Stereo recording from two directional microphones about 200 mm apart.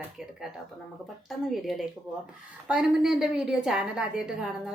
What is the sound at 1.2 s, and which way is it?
A woman's voice, centre (ahead or behind).